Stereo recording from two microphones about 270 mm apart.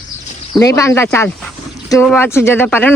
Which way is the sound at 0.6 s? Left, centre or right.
Centre.